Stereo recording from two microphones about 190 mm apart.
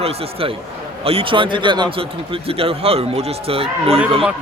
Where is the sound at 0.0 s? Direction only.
30° right (ahead or behind).